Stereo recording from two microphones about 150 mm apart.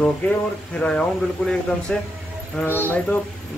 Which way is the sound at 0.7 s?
5° left (ahead or behind).